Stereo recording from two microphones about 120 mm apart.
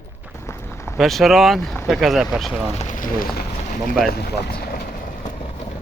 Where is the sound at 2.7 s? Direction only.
90° left.